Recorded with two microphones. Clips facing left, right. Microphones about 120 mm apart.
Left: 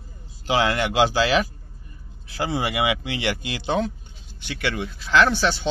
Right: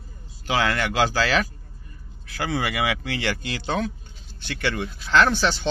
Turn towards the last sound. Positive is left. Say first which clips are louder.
# left 1 dB
turn(degrees=5)  # may be behind; listen again after turning